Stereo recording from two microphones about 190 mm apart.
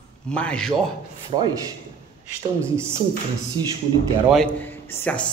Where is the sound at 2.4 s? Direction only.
30° right (ahead or behind).